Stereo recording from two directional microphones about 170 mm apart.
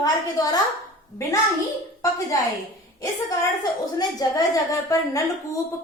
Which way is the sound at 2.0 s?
20° left (ahead or behind).